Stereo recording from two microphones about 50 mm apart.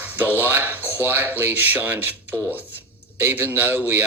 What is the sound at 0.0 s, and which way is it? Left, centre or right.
Speech, right.